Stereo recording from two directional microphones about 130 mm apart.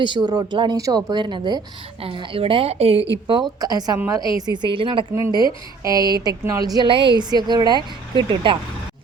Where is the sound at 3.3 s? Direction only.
30° right (ahead or behind).